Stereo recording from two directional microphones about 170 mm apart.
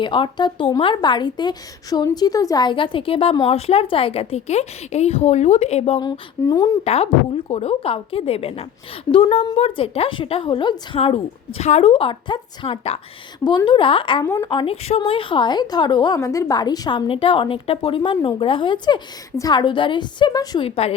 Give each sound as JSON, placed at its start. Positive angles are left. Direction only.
{"t": 0.0, "sound": "a woman's voice", "side_deg": 30}
{"t": 6.0, "sound": "a woman's voice", "side_deg": 20}
{"t": 6.8, "sound": "a woman's voice", "side_deg": 35}
{"t": 13.4, "sound": "a woman's voice", "side_deg": 25}
{"t": 20.7, "sound": "a woman's voice", "side_deg": 35}